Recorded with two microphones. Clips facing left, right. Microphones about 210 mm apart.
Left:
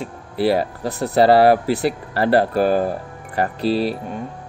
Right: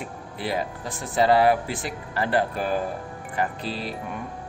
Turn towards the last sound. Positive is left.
turn(degrees=35)  # may be behind; listen again after turning